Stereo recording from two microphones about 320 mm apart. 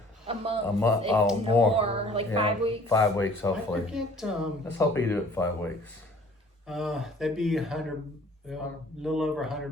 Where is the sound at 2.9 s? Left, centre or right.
Centre.